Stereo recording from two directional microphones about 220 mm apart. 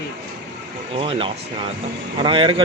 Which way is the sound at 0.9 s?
25° right (ahead or behind).